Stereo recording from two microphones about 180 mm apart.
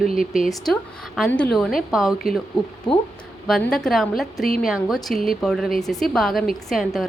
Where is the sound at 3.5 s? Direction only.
5° left (ahead or behind).